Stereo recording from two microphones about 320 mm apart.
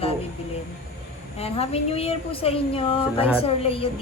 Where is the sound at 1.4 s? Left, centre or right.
Centre.